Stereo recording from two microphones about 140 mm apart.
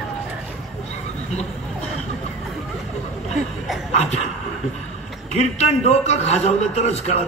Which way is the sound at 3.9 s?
50° left (ahead or behind).